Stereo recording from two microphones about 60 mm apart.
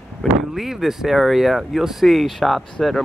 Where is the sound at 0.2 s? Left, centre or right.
Centre.